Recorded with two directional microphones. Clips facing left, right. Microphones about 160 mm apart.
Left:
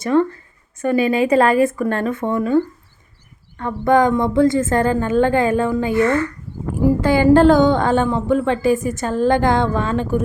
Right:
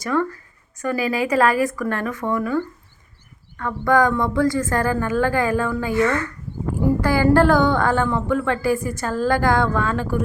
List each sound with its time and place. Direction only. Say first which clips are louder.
0.0 s a woman's voice: left 6 dB; 25° left (ahead or behind)
3.6 s a woman's voice: left 3 dB; 25° left (ahead or behind)